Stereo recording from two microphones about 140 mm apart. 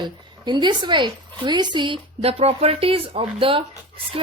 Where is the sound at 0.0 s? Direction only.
30° right (ahead or behind).